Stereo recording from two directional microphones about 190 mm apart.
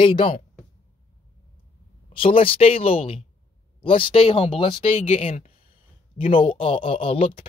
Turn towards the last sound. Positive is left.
turn(degrees=30)  # may be behind; listen again after turning